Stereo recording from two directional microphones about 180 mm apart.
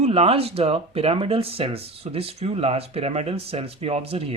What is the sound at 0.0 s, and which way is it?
Speech, 35° right (ahead or behind).